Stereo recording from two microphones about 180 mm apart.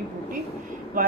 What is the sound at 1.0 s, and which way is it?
Speech, 50° right (ahead or behind).